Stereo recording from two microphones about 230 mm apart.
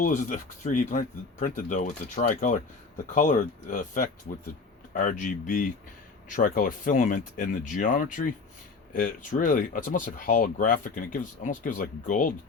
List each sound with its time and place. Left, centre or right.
0.0 s speech: left